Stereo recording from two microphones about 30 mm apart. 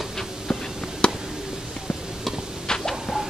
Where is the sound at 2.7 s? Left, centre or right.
Centre.